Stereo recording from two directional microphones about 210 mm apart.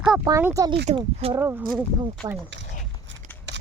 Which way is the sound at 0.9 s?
25° right (ahead or behind).